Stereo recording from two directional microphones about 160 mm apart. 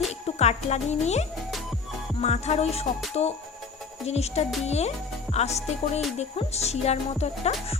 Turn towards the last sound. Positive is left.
turn(degrees=40)  # may be behind; listen again after turning